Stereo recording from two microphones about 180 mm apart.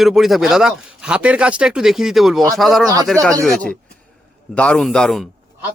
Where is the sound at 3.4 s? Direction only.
5° left (ahead or behind).